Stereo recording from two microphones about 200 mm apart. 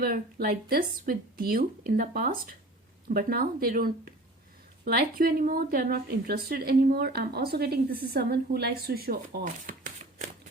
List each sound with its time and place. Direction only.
0.0 s a woman's voice: 50° right (ahead or behind)